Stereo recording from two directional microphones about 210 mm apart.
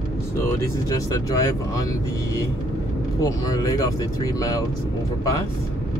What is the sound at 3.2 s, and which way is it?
Speech, 15° left (ahead or behind).